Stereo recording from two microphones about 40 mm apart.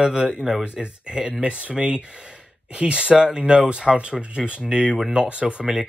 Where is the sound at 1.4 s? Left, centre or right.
Right.